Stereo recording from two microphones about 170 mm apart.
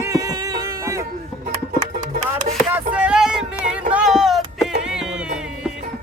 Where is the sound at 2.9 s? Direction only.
5° right (ahead or behind).